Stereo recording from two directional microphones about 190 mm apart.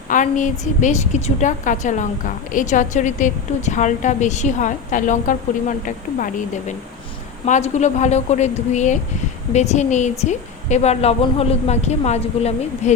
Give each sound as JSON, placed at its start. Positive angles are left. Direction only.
{"t": 0.1, "sound": "a woman's voice", "side_deg": 40}